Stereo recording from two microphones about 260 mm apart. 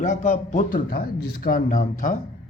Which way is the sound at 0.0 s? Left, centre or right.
Left.